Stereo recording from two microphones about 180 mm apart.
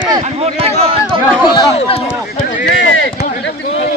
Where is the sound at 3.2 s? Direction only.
45° left (ahead or behind).